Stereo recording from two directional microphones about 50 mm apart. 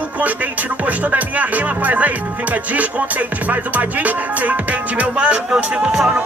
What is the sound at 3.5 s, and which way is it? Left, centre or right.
Music, right.